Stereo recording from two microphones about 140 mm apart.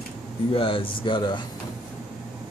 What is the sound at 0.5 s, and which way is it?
Speech, 40° left (ahead or behind).